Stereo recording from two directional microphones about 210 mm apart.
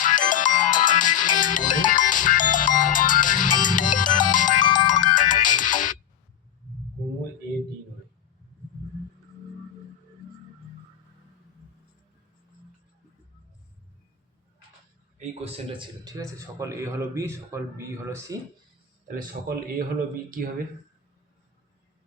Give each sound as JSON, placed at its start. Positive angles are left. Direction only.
{"t": 0.0, "sound": "music", "side_deg": 40}
{"t": 4.6, "sound": "music", "side_deg": 20}
{"t": 5.1, "sound": "music", "side_deg": 40}
{"t": 15.2, "sound": "a man's voice", "side_deg": -30}
{"t": 16.0, "sound": "a man's voice", "side_deg": -15}
{"t": 19.0, "sound": "speech", "side_deg": -45}